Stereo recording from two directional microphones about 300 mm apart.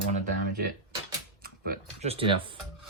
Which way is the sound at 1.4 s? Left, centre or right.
Right.